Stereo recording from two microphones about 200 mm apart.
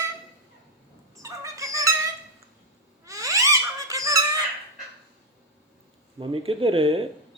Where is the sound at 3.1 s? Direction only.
15° right (ahead or behind).